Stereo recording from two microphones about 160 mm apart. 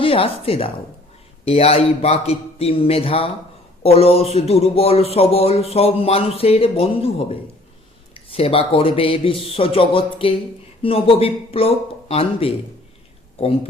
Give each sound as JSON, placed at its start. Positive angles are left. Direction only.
{"t": 0.0, "sound": "a woman's voice", "side_deg": 35}